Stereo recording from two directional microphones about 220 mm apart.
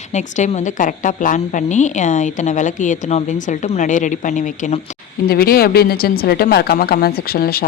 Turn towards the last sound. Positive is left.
turn(degrees=45)  # may be behind; listen again after turning